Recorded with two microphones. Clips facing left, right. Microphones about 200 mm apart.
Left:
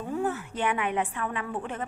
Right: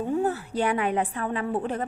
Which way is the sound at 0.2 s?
35° right (ahead or behind).